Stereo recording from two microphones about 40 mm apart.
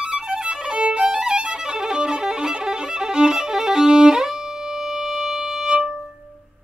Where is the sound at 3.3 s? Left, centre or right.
Centre.